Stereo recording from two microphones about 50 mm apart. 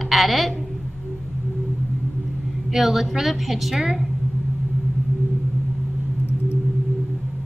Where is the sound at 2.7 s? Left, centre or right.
Centre.